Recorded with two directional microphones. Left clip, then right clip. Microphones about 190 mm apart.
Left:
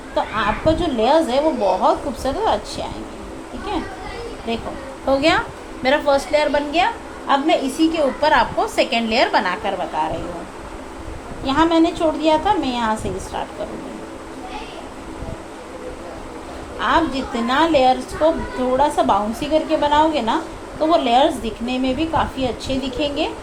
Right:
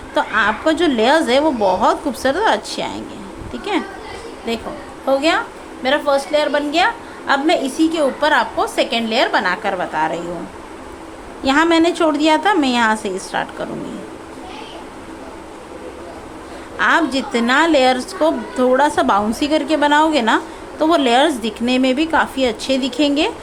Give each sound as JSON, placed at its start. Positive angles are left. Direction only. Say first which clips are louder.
{"t": 0.1, "sound": "a woman's voice", "louder": "right 4 dB", "side_deg": -30}
{"t": 4.5, "sound": "a woman's voice", "louder": "right 2 dB", "side_deg": -20}
{"t": 5.0, "sound": "a woman's voice", "louder": "right 1 dB", "side_deg": 0}
{"t": 6.8, "sound": "a woman's voice", "louder": "right 2 dB", "side_deg": -15}
{"t": 10.0, "sound": "a woman's voice", "louder": "right 3 dB", "side_deg": -25}
{"t": 11.4, "sound": "a woman's voice", "louder": "right 2 dB", "side_deg": -30}
{"t": 16.7, "sound": "a woman's voice", "louder": "right 3 dB", "side_deg": -25}